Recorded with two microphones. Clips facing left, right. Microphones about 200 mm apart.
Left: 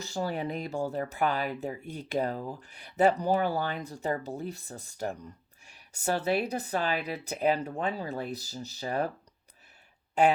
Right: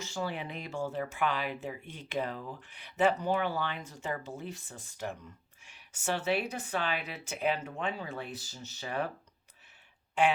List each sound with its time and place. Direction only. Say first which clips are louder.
0.0 s speech: left 4 dB; 40° left (ahead or behind)
10.2 s speech: left 4 dB; 40° left (ahead or behind)